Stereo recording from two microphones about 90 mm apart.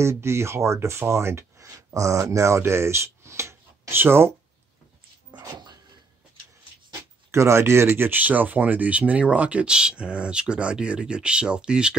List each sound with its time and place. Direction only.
0.0 s speech: 30° right (ahead or behind)
5.3 s a sound: 55° right (ahead or behind)
7.2 s speech: 30° right (ahead or behind); by 11.9 s 10° right (ahead or behind)